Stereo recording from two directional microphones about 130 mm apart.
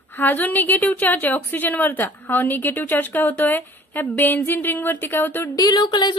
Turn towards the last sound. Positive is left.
turn(degrees=30)  # may be behind; listen again after turning